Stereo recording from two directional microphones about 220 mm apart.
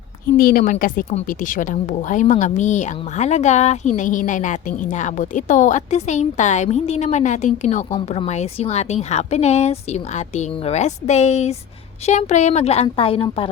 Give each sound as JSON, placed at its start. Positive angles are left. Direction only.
{"t": 0.3, "sound": "a woman's voice", "side_deg": 40}